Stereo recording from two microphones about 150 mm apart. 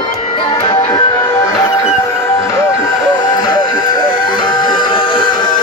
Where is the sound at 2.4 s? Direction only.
20° left (ahead or behind).